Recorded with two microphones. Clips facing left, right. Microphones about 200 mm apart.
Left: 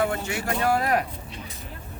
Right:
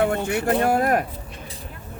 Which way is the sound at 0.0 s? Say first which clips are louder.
Right 5 dB; 60° right (ahead or behind).